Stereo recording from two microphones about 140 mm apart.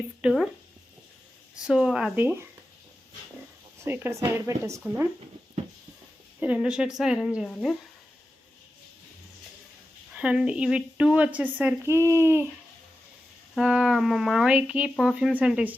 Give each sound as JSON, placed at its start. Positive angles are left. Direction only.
{"t": 0.2, "sound": "a sound", "side_deg": -5}
{"t": 1.6, "sound": "speech", "side_deg": -5}
{"t": 2.1, "sound": "speech", "side_deg": -15}
{"t": 3.8, "sound": "speech", "side_deg": -15}
{"t": 6.4, "sound": "speech", "side_deg": -10}
{"t": 10.2, "sound": "speech", "side_deg": -5}
{"t": 13.6, "sound": "speech", "side_deg": -5}